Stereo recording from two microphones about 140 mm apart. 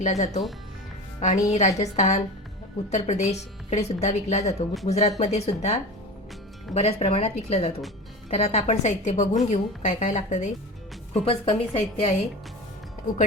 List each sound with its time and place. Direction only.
0.0 s a woman's voice: 55° left (ahead or behind)
11.1 s a woman's voice: 50° left (ahead or behind)